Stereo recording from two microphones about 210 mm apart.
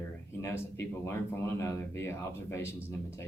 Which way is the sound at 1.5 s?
10° left (ahead or behind).